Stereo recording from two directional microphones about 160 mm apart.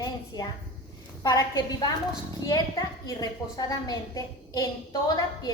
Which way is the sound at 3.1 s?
25° left (ahead or behind).